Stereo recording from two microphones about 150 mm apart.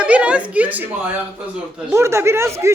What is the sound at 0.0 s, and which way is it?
A woman's voice, 10° right (ahead or behind).